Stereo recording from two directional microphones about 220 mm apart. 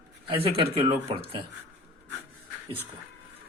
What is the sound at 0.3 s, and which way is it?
Speech, 25° right (ahead or behind).